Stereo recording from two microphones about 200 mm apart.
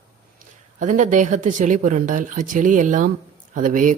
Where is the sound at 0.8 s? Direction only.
40° right (ahead or behind).